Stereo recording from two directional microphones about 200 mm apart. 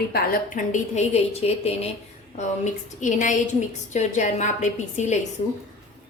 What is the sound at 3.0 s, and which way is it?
A woman's voice, 40° left (ahead or behind).